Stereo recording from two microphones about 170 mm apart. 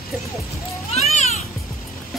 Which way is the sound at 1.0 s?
40° left (ahead or behind).